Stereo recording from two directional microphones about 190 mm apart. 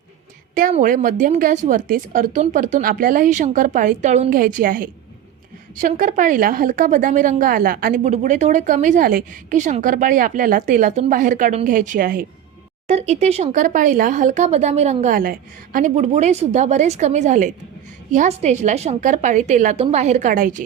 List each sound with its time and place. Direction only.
0.5 s a woman's voice: 45° right (ahead or behind)
12.9 s speech: 35° right (ahead or behind)